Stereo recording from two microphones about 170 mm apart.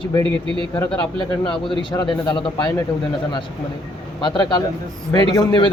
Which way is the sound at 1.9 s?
25° left (ahead or behind).